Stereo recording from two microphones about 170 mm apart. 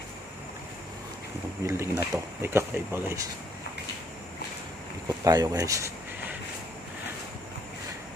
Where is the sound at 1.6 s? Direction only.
15° right (ahead or behind).